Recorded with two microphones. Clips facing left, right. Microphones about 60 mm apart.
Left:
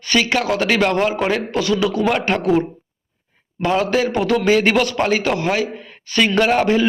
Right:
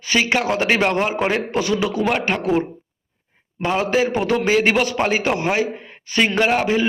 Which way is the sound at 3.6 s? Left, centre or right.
Centre.